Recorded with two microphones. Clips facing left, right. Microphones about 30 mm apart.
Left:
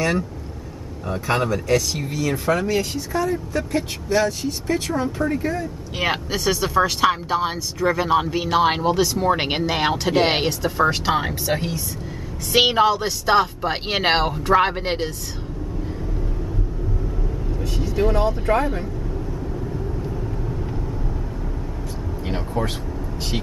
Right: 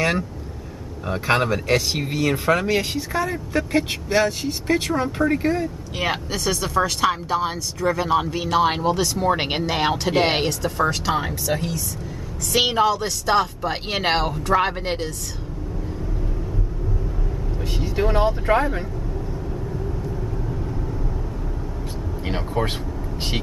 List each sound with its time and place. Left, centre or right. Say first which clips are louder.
1.0 s speech: right 2 dB; right
2.6 s speech: even; right
4.8 s speech: right 1 dB; centre
5.2 s speech: right 3 dB; right
5.9 s speech: left 2 dB; centre
17.6 s vehicle: left 1 dB; right
18.6 s speech: even; centre
22.2 s speech: right 1 dB; right